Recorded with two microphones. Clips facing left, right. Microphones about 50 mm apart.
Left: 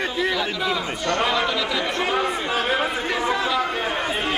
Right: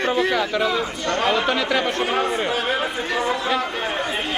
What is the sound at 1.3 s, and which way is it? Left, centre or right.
Speech, right.